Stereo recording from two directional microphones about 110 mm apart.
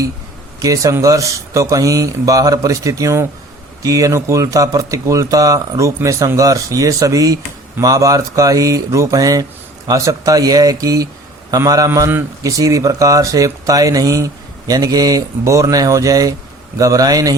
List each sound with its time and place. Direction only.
0.6 s speech: 30° right (ahead or behind)